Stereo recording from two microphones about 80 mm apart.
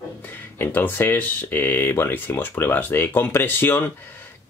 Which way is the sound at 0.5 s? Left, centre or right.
Left.